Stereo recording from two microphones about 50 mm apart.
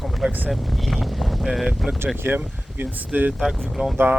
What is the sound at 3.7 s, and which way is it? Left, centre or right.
Speech, centre.